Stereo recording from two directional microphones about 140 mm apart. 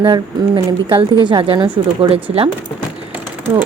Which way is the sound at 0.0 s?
40° right (ahead or behind).